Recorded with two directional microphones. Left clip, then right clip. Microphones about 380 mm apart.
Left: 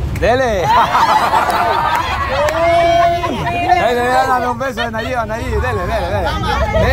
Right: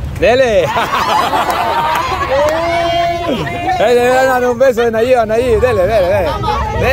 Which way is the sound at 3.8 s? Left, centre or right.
Centre.